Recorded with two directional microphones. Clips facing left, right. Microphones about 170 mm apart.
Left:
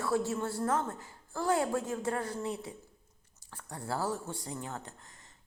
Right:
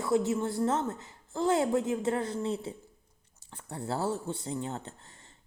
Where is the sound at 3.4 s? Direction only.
20° right (ahead or behind).